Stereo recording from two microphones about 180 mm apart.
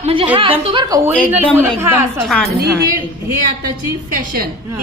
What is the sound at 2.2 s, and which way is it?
Speech, centre (ahead or behind).